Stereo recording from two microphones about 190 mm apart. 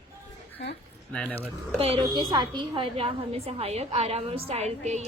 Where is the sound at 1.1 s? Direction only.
5° left (ahead or behind).